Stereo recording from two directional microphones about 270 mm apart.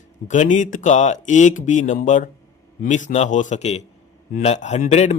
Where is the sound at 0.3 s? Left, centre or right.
Left.